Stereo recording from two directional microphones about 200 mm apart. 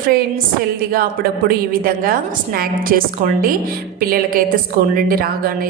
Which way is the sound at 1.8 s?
45° right (ahead or behind).